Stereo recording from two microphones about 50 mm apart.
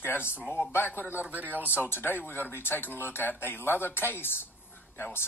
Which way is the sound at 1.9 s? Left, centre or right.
Left.